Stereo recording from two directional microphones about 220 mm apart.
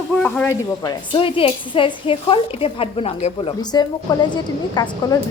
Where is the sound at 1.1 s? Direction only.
25° left (ahead or behind).